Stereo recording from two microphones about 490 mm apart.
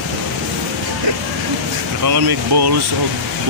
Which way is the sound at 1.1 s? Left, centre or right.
Right.